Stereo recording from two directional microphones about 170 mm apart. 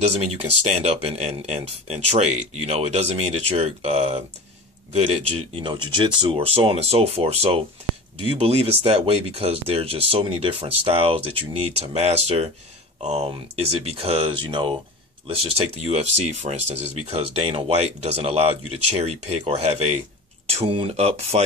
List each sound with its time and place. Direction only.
0.2 s speech: 40° right (ahead or behind)